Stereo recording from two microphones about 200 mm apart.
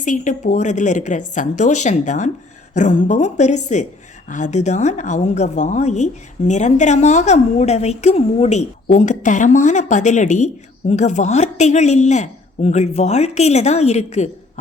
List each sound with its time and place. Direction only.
0.0 s a woman's voice: 40° left (ahead or behind)